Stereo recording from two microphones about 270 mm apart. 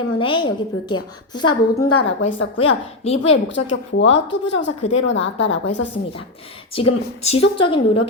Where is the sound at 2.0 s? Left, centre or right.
Left.